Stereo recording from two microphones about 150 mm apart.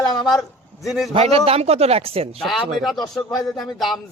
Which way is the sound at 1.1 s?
45° right (ahead or behind).